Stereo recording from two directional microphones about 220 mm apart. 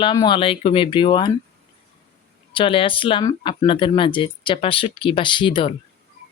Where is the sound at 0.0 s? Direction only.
20° left (ahead or behind).